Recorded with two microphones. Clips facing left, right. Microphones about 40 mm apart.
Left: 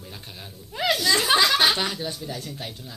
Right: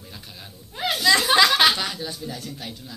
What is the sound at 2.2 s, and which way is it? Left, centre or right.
Speech, centre.